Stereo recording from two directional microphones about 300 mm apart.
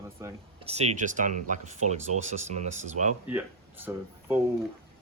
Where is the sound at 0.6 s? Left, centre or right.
Right.